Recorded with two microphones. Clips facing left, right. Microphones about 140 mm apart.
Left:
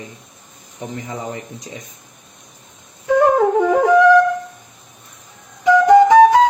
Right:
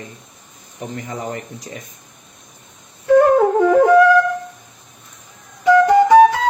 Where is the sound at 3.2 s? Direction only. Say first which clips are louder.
Even; 15° left (ahead or behind).